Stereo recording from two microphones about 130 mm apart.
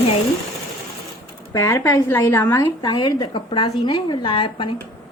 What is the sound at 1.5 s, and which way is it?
A woman's voice, 20° left (ahead or behind).